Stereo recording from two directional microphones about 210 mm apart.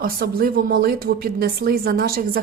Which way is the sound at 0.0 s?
45° right (ahead or behind).